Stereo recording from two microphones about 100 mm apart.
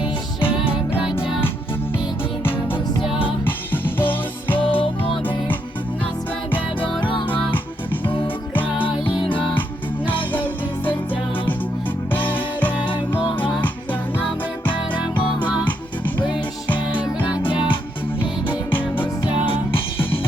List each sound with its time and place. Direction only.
0.0 s music: 60° left (ahead or behind)
2.4 s music: 20° left (ahead or behind)
4.8 s music: 60° left (ahead or behind)
8.8 s music: 55° left (ahead or behind)
10.3 s music: 20° left (ahead or behind)
12.1 s music: 15° left (ahead or behind)
16.1 s music: 50° left (ahead or behind)
17.0 s music: 15° right (ahead or behind)
18.4 s music: 20° left (ahead or behind)